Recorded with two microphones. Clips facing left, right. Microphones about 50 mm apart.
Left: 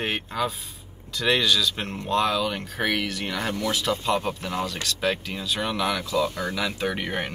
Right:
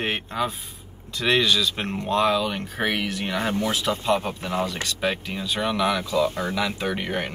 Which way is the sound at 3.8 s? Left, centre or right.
Centre.